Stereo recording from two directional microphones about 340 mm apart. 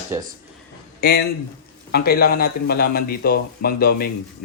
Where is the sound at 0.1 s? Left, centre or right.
Centre.